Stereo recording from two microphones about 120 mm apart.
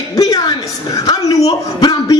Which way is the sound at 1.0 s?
30° left (ahead or behind).